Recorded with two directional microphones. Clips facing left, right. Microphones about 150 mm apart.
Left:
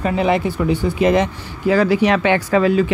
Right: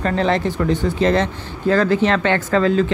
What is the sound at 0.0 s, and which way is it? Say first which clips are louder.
Speech: left 1 dB; 10° left (ahead or behind).